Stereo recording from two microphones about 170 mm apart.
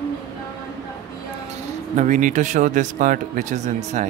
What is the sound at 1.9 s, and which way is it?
Speech, 45° right (ahead or behind).